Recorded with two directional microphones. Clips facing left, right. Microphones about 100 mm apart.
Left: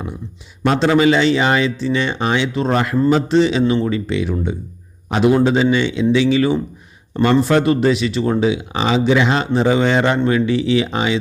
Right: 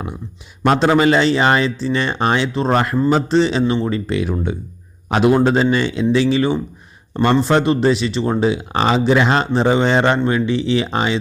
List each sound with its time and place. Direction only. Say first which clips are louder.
0.6 s speech: even; 50° right (ahead or behind)
5.0 s a man's voice: even; 65° right (ahead or behind)
5.3 s speech: left 1 dB; 40° right (ahead or behind)
7.4 s speech: even; 25° right (ahead or behind)